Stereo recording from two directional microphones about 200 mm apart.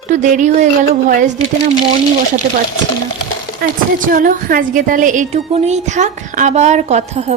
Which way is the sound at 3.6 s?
45° right (ahead or behind).